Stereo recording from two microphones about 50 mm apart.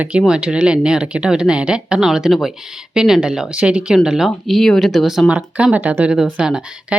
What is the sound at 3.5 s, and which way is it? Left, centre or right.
Speech, right.